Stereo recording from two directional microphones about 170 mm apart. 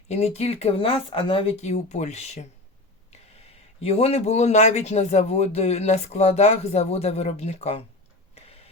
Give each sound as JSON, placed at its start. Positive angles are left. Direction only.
{"t": 0.1, "sound": "speech", "side_deg": 40}
{"t": 3.8, "sound": "speech", "side_deg": 35}
{"t": 8.4, "sound": "a sound", "side_deg": 35}